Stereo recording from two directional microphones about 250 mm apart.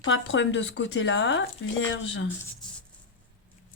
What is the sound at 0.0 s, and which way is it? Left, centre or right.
A woman's voice, left.